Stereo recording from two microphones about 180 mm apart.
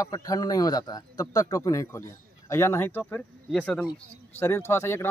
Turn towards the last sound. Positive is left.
turn(degrees=15)  # may be behind; listen again after turning